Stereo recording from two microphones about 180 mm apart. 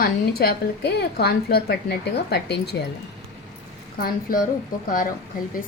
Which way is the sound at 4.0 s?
55° left (ahead or behind).